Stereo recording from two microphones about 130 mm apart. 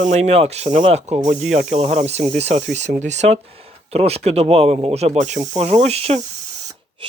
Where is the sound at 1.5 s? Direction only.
65° right (ahead or behind).